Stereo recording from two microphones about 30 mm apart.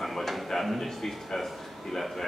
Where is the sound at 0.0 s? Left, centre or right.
Centre.